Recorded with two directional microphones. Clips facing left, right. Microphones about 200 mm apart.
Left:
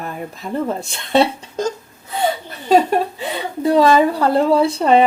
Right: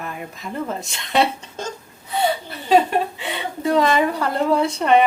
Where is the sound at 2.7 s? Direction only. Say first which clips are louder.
Left 2 dB; 40° left (ahead or behind).